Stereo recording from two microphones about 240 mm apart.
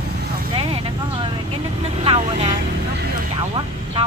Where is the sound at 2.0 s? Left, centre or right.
Right.